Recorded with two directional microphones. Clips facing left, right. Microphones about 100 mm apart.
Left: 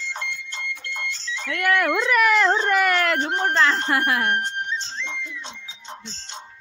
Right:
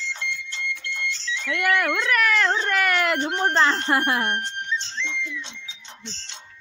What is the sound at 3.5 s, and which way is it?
Speech, 30° right (ahead or behind).